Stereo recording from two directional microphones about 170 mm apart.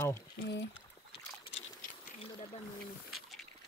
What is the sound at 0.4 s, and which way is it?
Speech, 90° left.